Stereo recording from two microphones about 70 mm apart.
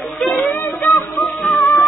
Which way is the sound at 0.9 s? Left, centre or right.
Centre.